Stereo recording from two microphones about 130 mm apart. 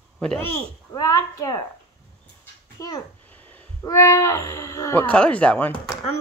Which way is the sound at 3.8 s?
25° left (ahead or behind).